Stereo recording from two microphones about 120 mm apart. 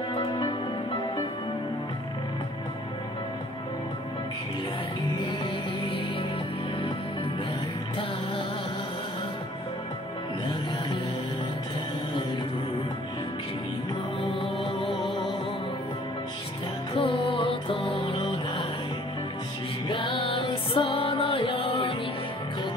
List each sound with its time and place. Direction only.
0.1 s music: 45° left (ahead or behind)
5.2 s music: 45° left (ahead or behind)
16.9 s music: 50° left (ahead or behind)
19.9 s music: 45° left (ahead or behind)